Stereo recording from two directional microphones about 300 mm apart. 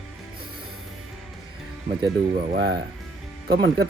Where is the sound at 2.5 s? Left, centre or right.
Right.